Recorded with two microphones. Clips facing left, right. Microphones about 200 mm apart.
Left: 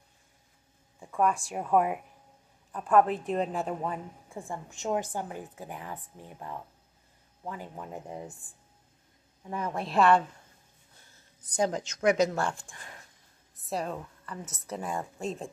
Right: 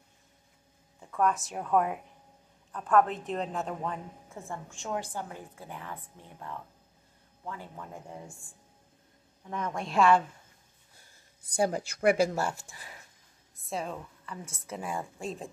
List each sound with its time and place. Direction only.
1.0 s a woman's voice: 10° left (ahead or behind)
9.5 s a woman's voice: 10° left (ahead or behind)
11.4 s a woman's voice: 10° right (ahead or behind)